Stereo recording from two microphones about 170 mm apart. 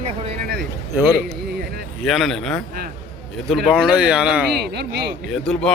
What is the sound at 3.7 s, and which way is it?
A man's voice, 5° right (ahead or behind).